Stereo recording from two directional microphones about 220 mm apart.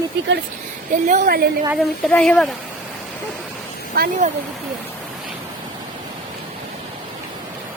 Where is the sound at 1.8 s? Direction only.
5° left (ahead or behind).